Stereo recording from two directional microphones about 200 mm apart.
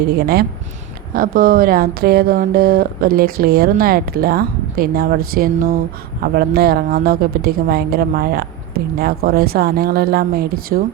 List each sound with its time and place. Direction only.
0.1 s speech: 55° right (ahead or behind)